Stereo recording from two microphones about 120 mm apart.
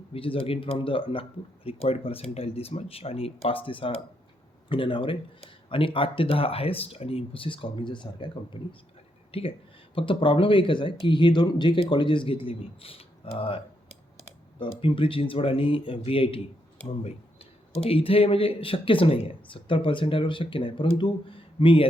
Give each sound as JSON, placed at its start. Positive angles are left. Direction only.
{"t": 0.1, "sound": "speech", "side_deg": 50}
{"t": 9.3, "sound": "speech", "side_deg": 50}
{"t": 14.6, "sound": "speech", "side_deg": 45}
{"t": 17.8, "sound": "speech", "side_deg": 50}